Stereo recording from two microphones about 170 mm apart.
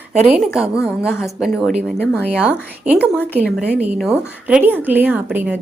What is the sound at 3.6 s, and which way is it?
A woman's voice, 10° right (ahead or behind).